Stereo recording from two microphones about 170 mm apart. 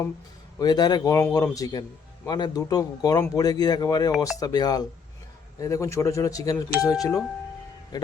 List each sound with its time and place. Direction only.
0.6 s speech: 25° left (ahead or behind)